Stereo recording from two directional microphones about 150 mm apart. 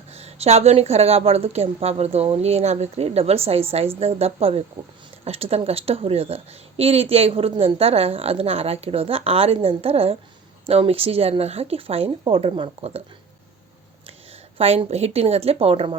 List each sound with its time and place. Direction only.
0.1 s a woman's voice: 45° right (ahead or behind)
14.6 s a woman's voice: 45° right (ahead or behind)